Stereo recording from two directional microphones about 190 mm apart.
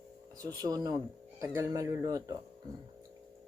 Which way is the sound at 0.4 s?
20° right (ahead or behind).